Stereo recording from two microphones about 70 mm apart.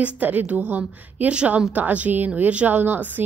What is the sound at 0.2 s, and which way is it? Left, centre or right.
A woman's voice, right.